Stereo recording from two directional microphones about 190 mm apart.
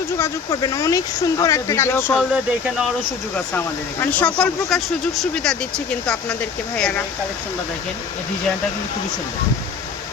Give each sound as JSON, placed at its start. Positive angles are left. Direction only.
{"t": 0.2, "sound": "speech", "side_deg": 15}
{"t": 2.1, "sound": "speech", "side_deg": -5}
{"t": 4.0, "sound": "speech", "side_deg": 10}